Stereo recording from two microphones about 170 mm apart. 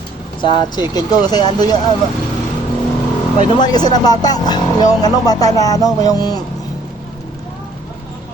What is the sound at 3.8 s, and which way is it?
Speech, 25° left (ahead or behind).